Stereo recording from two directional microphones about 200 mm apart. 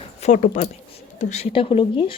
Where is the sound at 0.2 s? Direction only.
40° left (ahead or behind).